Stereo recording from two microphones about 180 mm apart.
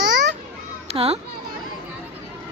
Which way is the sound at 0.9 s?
35° right (ahead or behind).